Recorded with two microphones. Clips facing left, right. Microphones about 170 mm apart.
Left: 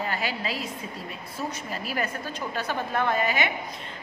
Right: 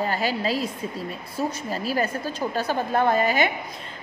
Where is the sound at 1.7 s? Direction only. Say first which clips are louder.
Right 5 dB; 35° right (ahead or behind).